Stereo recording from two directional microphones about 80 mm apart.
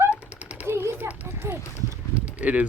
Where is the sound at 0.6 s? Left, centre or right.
Right.